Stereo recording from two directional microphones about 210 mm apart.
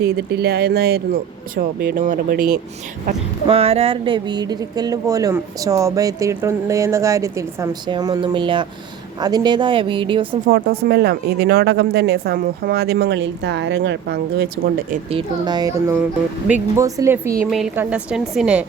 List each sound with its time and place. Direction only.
0.0 s speech: 50° right (ahead or behind)
3.4 s speech: 25° right (ahead or behind)
10.4 s speech: 45° right (ahead or behind)
15.1 s a woman's voice: 20° right (ahead or behind); by 18.6 s 5° right (ahead or behind)